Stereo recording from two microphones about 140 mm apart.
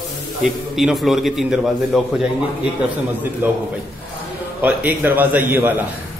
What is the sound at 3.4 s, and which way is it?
Speech, 15° right (ahead or behind).